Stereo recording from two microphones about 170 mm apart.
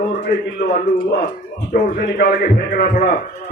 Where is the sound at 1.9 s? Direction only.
70° left (ahead or behind).